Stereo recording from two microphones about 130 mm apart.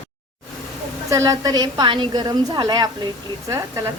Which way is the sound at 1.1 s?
25° right (ahead or behind).